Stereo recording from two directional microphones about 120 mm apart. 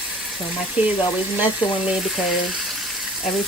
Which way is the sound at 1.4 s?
5° right (ahead or behind).